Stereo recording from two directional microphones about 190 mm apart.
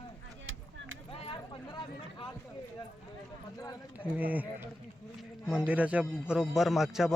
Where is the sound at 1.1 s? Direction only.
30° left (ahead or behind).